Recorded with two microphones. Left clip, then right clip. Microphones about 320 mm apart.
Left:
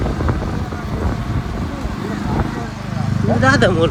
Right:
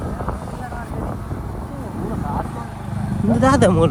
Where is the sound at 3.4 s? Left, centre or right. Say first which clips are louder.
Left 1 dB; centre.